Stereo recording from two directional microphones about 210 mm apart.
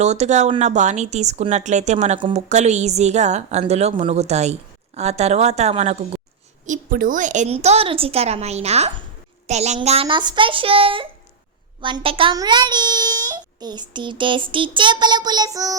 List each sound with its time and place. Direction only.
0.0 s a child's voice: 35° right (ahead or behind); by 15.8 s 15° right (ahead or behind)